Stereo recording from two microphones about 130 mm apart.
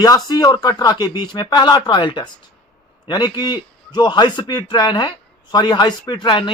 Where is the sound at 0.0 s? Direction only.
30° left (ahead or behind).